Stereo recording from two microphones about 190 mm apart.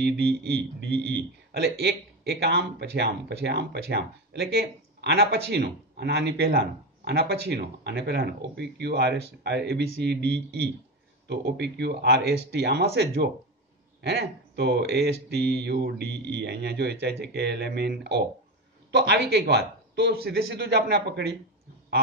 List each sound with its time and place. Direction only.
0.0 s a man's voice: 60° right (ahead or behind)